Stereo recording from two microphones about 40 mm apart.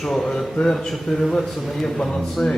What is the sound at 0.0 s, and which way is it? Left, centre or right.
A man's voice, centre.